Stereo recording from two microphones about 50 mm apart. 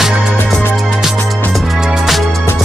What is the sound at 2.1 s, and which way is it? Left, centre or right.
Music, centre.